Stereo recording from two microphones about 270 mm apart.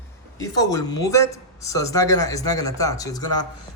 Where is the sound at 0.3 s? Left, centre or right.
Centre.